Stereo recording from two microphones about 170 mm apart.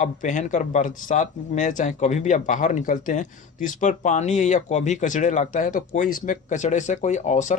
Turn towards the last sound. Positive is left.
turn(degrees=45)  # may be behind; listen again after turning